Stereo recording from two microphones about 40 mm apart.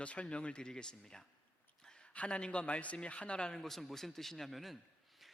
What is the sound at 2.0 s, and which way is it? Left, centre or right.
Speech, left.